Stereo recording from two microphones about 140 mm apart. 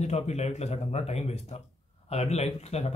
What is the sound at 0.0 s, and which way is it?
Speech, 50° left (ahead or behind).